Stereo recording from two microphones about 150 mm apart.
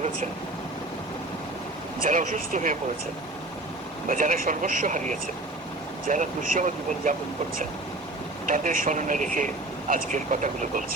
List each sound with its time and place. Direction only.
2.0 s speech: 60° right (ahead or behind)
4.1 s speech: 70° right (ahead or behind)
8.4 s speech: 65° right (ahead or behind)